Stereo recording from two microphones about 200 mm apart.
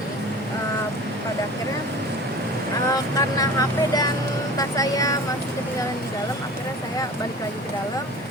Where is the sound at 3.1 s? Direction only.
15° left (ahead or behind).